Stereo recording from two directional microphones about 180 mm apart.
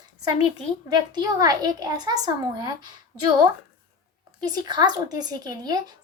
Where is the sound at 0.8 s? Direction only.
20° right (ahead or behind).